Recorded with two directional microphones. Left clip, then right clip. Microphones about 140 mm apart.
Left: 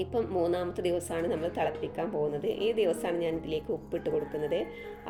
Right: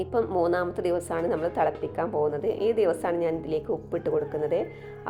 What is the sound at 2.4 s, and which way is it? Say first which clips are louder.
Speech: right 4 dB; 40° right (ahead or behind).